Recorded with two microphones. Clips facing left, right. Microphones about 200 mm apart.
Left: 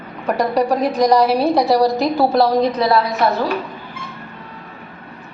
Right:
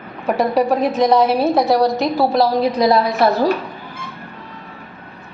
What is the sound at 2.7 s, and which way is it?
Speech, 15° right (ahead or behind).